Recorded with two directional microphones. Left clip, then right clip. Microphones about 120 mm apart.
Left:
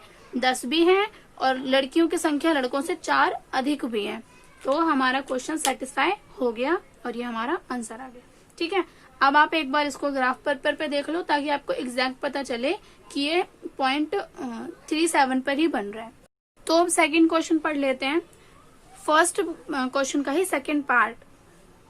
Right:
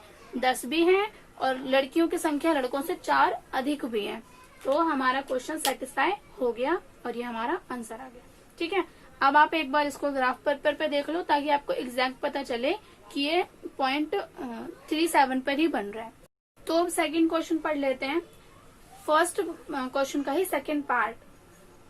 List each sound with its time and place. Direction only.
0.3 s a woman's voice: 40° left (ahead or behind)
4.6 s a woman's voice: 50° left (ahead or behind)
5.6 s a woman's voice: 45° left (ahead or behind)
16.6 s a woman's voice: 60° left (ahead or behind)